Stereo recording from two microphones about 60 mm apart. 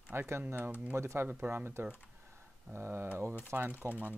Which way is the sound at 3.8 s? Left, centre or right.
Right.